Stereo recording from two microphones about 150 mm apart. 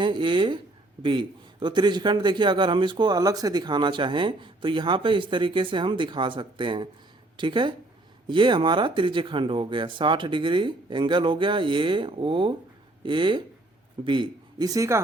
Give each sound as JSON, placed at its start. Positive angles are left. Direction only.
{"t": 0.0, "sound": "a man's voice", "side_deg": -35}